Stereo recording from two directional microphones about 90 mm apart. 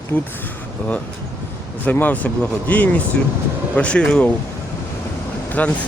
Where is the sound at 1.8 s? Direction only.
20° left (ahead or behind).